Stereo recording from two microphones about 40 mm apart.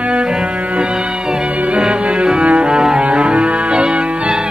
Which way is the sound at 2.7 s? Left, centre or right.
Right.